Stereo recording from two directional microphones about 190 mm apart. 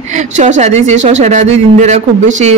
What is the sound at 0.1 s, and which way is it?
Speech, 40° right (ahead or behind).